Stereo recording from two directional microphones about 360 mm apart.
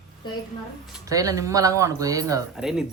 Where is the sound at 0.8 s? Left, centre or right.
Centre.